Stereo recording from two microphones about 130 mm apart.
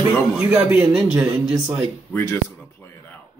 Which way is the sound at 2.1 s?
20° left (ahead or behind).